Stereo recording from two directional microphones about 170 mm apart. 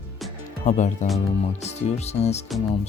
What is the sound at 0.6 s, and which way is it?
Speech, 45° left (ahead or behind).